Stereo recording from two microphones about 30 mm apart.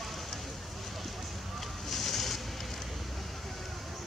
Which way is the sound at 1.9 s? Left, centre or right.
Centre.